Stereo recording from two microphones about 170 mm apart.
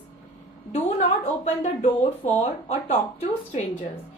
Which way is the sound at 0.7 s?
40° left (ahead or behind).